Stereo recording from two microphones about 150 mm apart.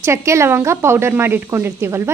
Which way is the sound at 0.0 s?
20° right (ahead or behind).